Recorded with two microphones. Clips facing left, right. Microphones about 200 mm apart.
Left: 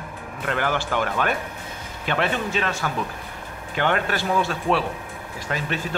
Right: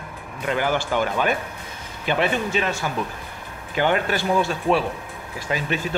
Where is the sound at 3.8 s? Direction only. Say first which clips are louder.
Right 2 dB; 5° right (ahead or behind).